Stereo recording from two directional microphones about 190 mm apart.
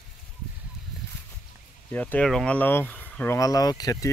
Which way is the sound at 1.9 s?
5° left (ahead or behind).